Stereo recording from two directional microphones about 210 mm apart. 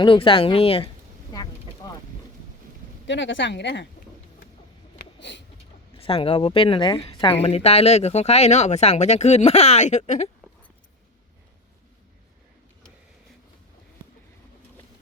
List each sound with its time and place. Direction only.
0.0 s speech: 25° left (ahead or behind)
3.1 s speech: 60° left (ahead or behind)
4.9 s a sound: 55° left (ahead or behind)
6.0 s speech: 25° left (ahead or behind)